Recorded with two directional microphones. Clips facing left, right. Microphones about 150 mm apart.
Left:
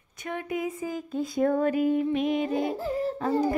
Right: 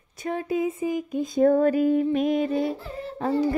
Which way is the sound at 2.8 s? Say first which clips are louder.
Left 7 dB; 40° left (ahead or behind).